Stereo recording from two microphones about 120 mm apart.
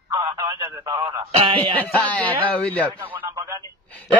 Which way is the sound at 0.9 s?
40° right (ahead or behind).